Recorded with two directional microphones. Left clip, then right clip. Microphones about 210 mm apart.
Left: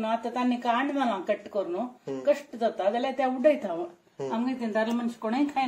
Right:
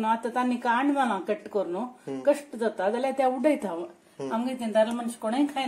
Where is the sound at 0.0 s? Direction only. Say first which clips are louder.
Right 2 dB; 35° right (ahead or behind).